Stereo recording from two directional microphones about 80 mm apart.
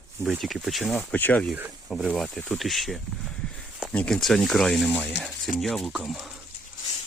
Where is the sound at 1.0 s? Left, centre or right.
Centre.